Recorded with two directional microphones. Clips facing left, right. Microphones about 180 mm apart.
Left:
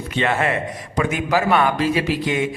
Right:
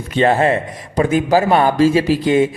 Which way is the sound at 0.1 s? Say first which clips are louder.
Right 7 dB; 35° right (ahead or behind).